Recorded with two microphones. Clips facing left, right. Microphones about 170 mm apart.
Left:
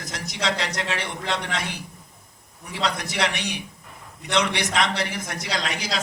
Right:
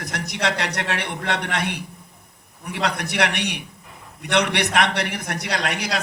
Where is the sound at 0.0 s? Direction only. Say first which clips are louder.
Right 3 dB; 60° right (ahead or behind).